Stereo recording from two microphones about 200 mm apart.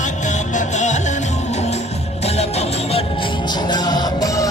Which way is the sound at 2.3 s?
30° left (ahead or behind).